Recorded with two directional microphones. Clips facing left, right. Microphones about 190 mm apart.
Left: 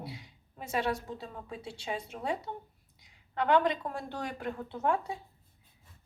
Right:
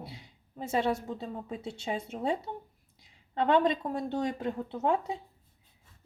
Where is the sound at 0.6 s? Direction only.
25° right (ahead or behind).